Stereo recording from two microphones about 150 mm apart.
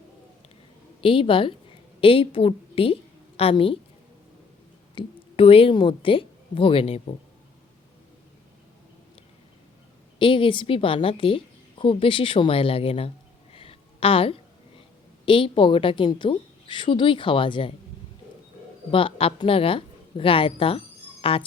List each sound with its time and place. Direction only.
1.0 s a woman's voice: 35° left (ahead or behind)
4.9 s a woman's voice: 40° left (ahead or behind)
10.2 s a woman's voice: 35° left (ahead or behind)
13.5 s a sound: 40° left (ahead or behind)
15.3 s a woman's voice: 35° left (ahead or behind)
18.9 s a woman's voice: 35° left (ahead or behind)